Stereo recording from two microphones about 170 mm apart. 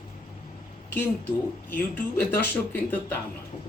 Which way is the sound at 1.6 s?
10° left (ahead or behind).